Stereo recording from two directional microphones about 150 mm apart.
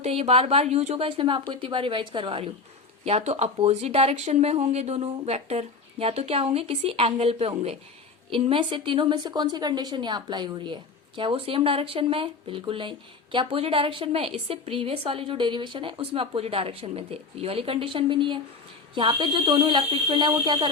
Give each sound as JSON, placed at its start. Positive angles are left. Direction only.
{"t": 0.0, "sound": "a woman's voice", "side_deg": -45}